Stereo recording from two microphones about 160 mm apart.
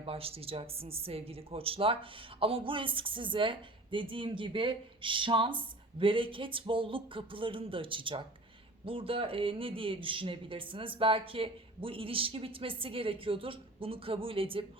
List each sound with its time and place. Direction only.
0.0 s speech: 35° right (ahead or behind)